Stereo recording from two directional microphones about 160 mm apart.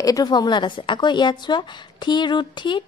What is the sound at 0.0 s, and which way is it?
Speech, 25° left (ahead or behind).